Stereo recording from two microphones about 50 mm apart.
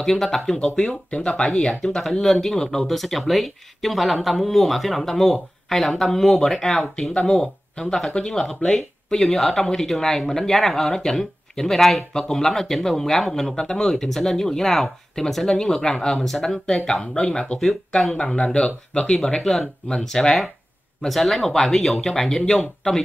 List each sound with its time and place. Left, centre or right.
0.0 s speech: centre
18.1 s speech: left
19.1 s speech: centre